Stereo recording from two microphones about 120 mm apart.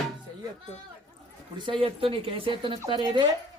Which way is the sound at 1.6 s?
45° right (ahead or behind).